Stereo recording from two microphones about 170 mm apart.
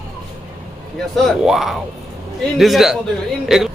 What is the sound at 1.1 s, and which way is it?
A man's voice, centre (ahead or behind).